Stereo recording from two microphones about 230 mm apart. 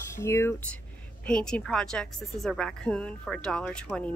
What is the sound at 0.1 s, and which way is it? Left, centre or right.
A woman's voice, centre.